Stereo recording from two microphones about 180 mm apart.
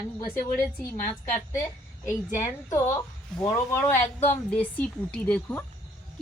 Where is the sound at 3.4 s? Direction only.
15° left (ahead or behind).